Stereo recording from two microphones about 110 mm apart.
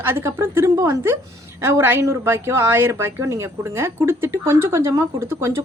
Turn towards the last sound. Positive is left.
turn(degrees=-25)  # may be behind; listen again after turning